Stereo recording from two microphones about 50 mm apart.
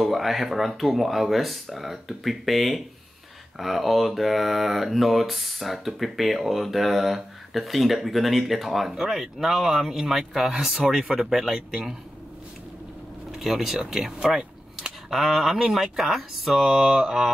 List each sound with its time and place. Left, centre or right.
0.0 s speech: centre
13.3 s speech: centre